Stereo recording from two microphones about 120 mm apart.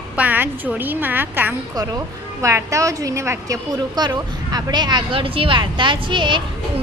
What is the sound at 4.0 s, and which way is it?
Speech, 35° right (ahead or behind).